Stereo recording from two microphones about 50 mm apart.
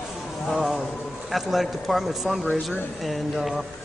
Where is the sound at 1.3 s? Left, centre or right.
Centre.